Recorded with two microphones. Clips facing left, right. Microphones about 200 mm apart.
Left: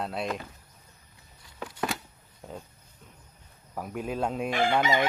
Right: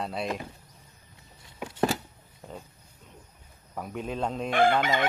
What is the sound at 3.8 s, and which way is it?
Speech, 5° left (ahead or behind).